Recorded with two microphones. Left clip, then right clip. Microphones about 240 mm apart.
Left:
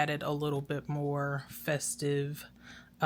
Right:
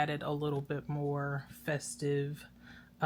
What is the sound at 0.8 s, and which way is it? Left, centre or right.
Speech, left.